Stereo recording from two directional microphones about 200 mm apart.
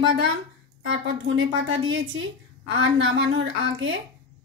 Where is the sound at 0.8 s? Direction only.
65° right (ahead or behind).